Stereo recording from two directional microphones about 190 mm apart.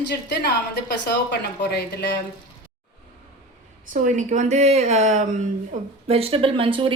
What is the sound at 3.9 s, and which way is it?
Speech, 40° right (ahead or behind).